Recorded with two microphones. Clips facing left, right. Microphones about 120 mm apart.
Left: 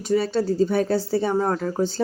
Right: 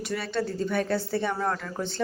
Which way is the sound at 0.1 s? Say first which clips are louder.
Left 9 dB; 30° left (ahead or behind).